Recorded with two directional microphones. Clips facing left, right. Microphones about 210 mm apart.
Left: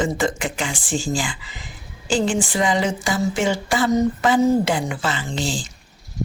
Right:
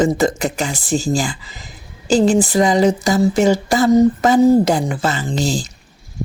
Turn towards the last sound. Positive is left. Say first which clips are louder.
# right 6 dB
turn(degrees=-40)  # may be behind; listen again after turning